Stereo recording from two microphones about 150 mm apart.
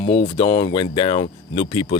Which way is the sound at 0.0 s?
35° left (ahead or behind).